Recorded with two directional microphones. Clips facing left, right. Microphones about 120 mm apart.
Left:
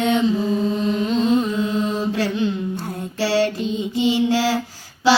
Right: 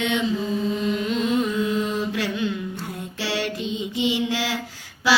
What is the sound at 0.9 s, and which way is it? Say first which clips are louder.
Carnatic music: left 4 dB; 35° left (ahead or behind).